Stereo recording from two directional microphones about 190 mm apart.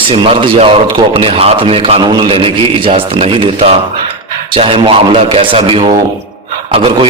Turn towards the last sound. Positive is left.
turn(degrees=-30)  # may be behind; listen again after turning